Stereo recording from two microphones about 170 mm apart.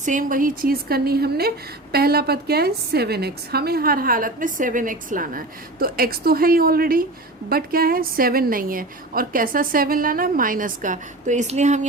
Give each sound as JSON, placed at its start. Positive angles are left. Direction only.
{"t": 0.0, "sound": "a woman's voice", "side_deg": -50}